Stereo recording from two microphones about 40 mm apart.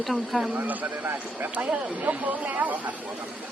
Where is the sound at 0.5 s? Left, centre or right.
Right.